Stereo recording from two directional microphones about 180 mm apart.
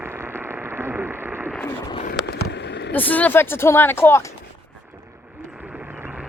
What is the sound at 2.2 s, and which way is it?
Vehicle, 65° left (ahead or behind).